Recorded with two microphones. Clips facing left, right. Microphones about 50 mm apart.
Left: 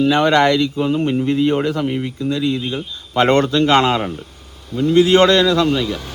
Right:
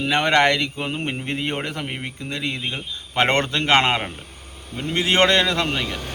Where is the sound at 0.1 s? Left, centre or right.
Right.